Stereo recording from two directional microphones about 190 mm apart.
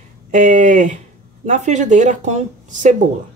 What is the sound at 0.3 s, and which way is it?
Speech, 40° right (ahead or behind).